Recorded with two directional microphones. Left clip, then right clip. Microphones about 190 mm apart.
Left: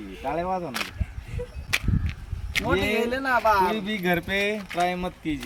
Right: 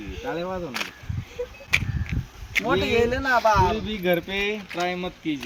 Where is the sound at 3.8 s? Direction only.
25° left (ahead or behind).